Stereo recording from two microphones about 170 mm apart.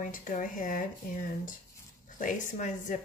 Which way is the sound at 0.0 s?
50° left (ahead or behind).